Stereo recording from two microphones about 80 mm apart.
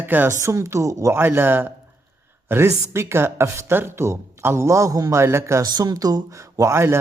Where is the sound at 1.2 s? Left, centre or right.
Right.